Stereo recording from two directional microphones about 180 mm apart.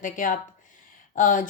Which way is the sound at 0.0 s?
45° left (ahead or behind).